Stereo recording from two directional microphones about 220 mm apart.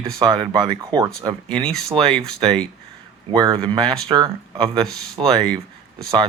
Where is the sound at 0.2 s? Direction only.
20° right (ahead or behind).